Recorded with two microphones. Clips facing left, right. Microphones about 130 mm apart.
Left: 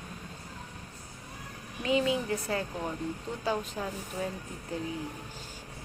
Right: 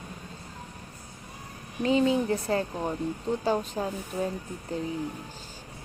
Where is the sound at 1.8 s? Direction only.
35° right (ahead or behind).